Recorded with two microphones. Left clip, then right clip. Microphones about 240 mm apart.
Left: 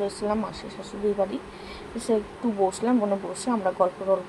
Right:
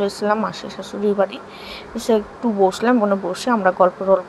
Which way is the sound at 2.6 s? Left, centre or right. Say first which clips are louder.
Right 8 dB; centre.